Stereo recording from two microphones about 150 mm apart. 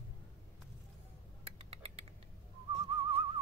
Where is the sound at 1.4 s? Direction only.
45° right (ahead or behind).